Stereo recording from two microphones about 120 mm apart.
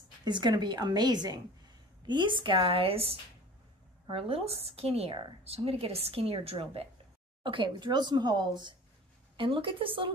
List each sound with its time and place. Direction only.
0.2 s a woman's voice: 40° right (ahead or behind); by 6.9 s 55° right (ahead or behind)
7.4 s a woman's voice: 45° right (ahead or behind)